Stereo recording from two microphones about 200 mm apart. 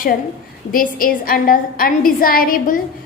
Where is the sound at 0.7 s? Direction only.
45° left (ahead or behind).